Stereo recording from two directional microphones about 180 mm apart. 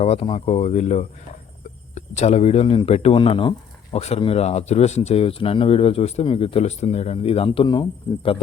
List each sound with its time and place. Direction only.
0.0 s speech: 35° left (ahead or behind)